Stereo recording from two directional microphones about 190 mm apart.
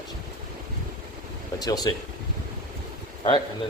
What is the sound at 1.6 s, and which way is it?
Speech, 20° left (ahead or behind).